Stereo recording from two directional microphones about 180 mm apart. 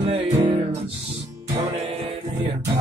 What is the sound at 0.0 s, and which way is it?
Music, 30° right (ahead or behind).